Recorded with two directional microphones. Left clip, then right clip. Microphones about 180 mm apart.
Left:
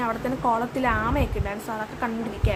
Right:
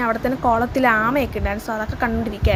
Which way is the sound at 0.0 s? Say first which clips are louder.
Right 5 dB; 25° right (ahead or behind).